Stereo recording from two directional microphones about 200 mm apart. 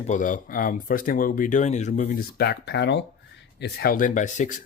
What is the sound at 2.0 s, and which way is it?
Speech, 55° left (ahead or behind).